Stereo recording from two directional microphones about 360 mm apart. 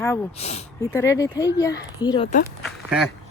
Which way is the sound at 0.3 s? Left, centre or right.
Centre.